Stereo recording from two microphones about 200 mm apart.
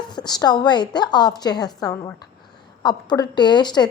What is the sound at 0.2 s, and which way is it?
A woman's voice, 20° left (ahead or behind).